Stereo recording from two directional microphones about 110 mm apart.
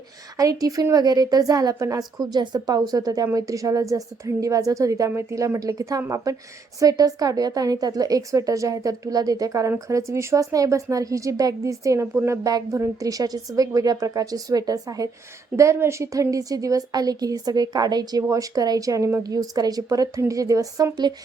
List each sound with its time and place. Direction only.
0.3 s a woman's voice: 30° right (ahead or behind)